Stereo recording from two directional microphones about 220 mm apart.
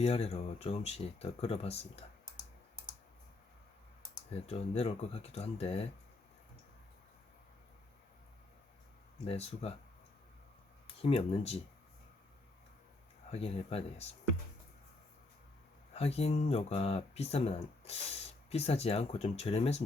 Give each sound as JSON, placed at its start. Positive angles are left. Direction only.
{"t": 0.0, "sound": "speech", "side_deg": 30}
{"t": 4.4, "sound": "speech", "side_deg": 30}
{"t": 9.2, "sound": "speech", "side_deg": 25}
{"t": 11.0, "sound": "speech", "side_deg": 25}
{"t": 13.3, "sound": "speech", "side_deg": 25}
{"t": 16.0, "sound": "speech", "side_deg": 30}